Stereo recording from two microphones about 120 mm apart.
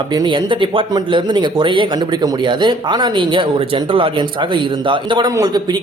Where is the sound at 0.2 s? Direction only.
45° right (ahead or behind).